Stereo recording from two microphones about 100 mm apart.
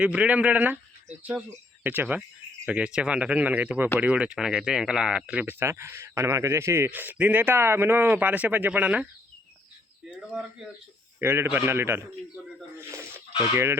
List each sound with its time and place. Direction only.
0.0 s speech: 10° right (ahead or behind)
11.2 s a man's voice: 25° right (ahead or behind)
12.7 s a sound: 25° right (ahead or behind)